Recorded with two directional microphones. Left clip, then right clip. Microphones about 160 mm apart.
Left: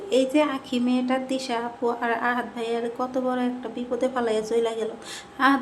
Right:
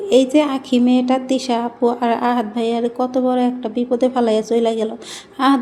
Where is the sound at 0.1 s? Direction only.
30° right (ahead or behind).